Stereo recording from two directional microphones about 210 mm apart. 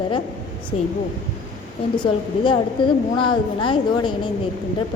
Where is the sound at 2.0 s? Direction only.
20° left (ahead or behind).